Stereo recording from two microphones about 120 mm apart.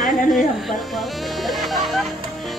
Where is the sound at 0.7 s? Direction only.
Centre (ahead or behind).